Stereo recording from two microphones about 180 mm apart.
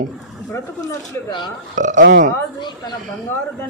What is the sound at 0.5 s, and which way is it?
Speech, 20° left (ahead or behind).